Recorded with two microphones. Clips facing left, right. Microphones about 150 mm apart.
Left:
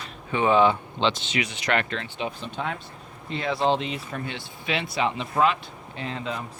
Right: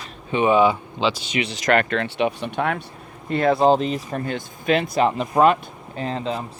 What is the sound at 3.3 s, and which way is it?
Speech, 50° right (ahead or behind).